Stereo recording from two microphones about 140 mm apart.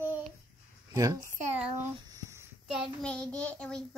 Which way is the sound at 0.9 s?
25° right (ahead or behind).